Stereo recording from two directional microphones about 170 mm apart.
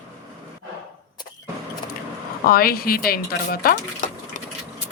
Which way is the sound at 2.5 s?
60° left (ahead or behind).